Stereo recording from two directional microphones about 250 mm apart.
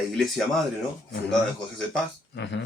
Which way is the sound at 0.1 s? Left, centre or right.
Centre.